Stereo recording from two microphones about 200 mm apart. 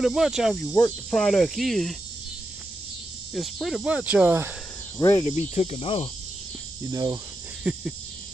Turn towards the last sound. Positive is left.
turn(degrees=-5)  # may be behind; listen again after turning